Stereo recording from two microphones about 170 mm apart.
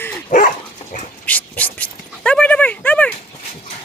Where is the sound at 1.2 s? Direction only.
10° left (ahead or behind).